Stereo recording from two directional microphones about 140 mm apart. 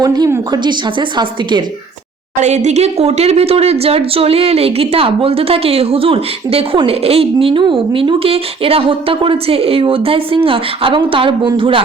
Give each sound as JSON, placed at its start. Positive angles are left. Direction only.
{"t": 0.0, "sound": "a woman's voice", "side_deg": -25}
{"t": 2.4, "sound": "speech", "side_deg": -55}